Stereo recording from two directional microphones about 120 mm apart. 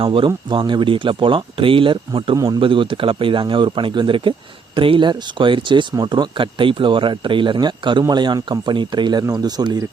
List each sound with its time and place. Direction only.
0.0 s speech: 45° right (ahead or behind)
2.3 s speech: 30° right (ahead or behind)
2.6 s speech: 45° right (ahead or behind)